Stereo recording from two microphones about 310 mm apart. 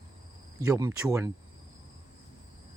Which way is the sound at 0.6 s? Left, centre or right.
Centre.